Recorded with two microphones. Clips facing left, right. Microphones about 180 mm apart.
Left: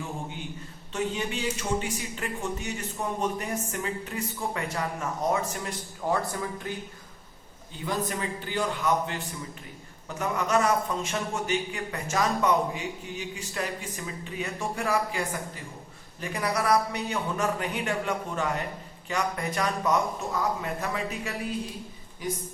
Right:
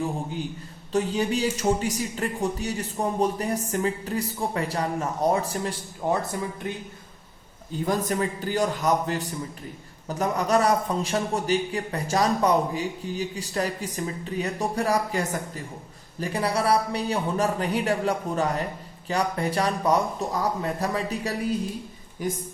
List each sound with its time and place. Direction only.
0.9 s a man's voice: 35° right (ahead or behind)
6.0 s speech: 20° right (ahead or behind)
7.9 s a man's voice: 45° right (ahead or behind)